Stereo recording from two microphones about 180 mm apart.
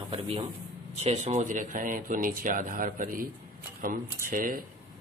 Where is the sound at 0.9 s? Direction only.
40° right (ahead or behind).